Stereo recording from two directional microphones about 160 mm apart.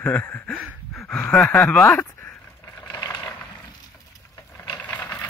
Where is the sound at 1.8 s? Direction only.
15° left (ahead or behind).